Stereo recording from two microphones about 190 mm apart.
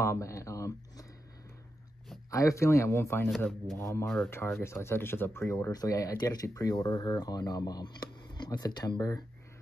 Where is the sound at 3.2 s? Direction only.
Centre (ahead or behind).